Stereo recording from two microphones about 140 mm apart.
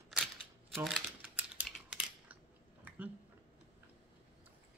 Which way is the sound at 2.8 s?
10° right (ahead or behind).